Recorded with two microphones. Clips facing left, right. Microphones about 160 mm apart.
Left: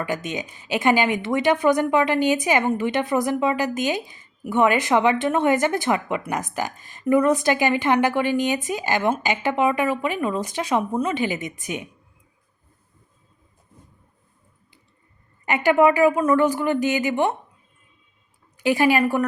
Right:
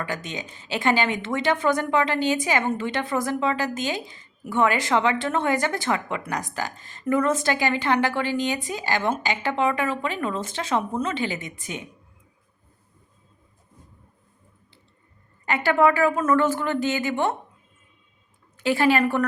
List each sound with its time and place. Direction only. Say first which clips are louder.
0.0 s a woman's voice: left 4 dB; 20° left (ahead or behind)
15.4 s a woman's voice: left 3 dB; 15° left (ahead or behind)
18.5 s a woman's voice: left 2 dB; 15° left (ahead or behind)